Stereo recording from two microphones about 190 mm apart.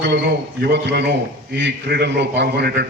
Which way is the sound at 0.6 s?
60° right (ahead or behind).